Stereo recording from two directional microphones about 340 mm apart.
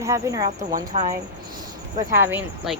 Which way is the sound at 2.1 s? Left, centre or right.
Centre.